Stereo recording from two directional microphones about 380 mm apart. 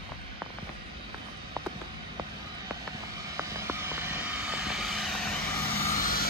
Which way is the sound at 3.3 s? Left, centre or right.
Centre.